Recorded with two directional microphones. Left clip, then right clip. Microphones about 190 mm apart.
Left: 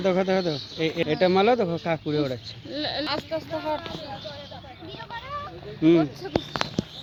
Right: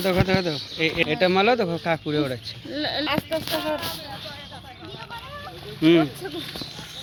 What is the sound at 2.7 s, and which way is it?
Speech, 40° right (ahead or behind).